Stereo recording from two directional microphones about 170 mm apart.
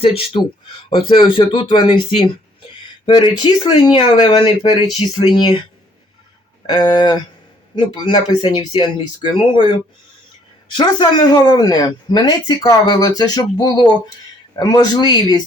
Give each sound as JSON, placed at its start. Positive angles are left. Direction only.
{"t": 0.0, "sound": "speech", "side_deg": 35}
{"t": 6.7, "sound": "speech", "side_deg": 25}
{"t": 10.8, "sound": "speech", "side_deg": 25}